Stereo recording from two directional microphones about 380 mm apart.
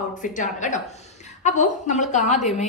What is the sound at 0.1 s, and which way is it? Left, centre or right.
A woman's voice, centre.